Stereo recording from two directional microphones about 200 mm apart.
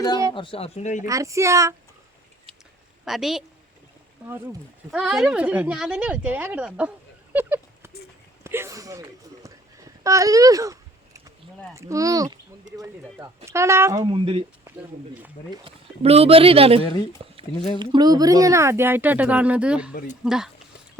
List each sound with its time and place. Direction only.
0.3 s speech: 25° left (ahead or behind)
1.0 s speech: 15° right (ahead or behind)
3.0 s a woman's voice: centre (ahead or behind)
4.9 s speech: 5° right (ahead or behind)
7.3 s a sound: 10° right (ahead or behind)
11.7 s speech: 15° right (ahead or behind)
15.6 s speech: 30° right (ahead or behind); by 19.9 s 5° right (ahead or behind)
19.9 s speech: 45° left (ahead or behind)
20.2 s speech: 5° right (ahead or behind)